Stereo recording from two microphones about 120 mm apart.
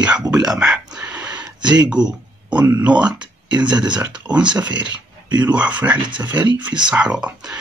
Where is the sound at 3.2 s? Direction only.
40° right (ahead or behind).